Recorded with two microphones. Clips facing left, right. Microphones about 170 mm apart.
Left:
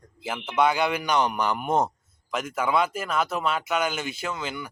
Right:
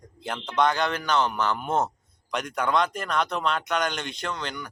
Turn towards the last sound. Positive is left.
turn(degrees=5)  # may be behind; listen again after turning